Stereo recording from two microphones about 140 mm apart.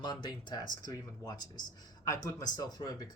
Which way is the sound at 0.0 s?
30° left (ahead or behind).